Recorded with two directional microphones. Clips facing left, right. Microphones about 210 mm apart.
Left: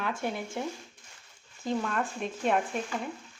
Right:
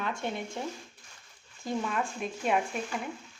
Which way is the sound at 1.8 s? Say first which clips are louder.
Left 1 dB; 5° right (ahead or behind).